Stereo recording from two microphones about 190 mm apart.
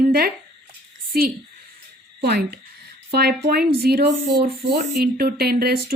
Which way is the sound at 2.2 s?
60° right (ahead or behind).